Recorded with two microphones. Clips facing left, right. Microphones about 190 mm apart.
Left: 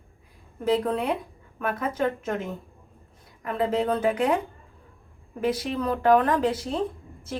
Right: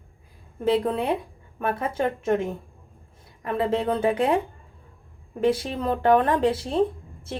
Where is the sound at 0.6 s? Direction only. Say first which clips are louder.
Right 2 dB; 25° right (ahead or behind).